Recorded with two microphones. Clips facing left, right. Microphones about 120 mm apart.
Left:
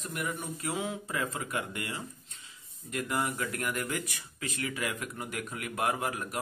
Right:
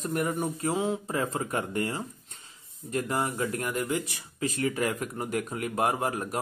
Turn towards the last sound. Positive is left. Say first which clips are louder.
# right 4 dB
turn(degrees=-35)  # may be behind; listen again after turning